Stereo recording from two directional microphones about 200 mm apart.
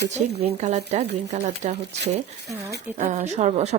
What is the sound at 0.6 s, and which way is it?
Speech, 35° right (ahead or behind).